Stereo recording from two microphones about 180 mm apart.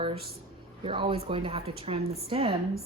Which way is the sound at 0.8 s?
30° right (ahead or behind).